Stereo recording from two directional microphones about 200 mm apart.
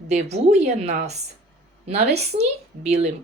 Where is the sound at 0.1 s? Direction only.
35° right (ahead or behind).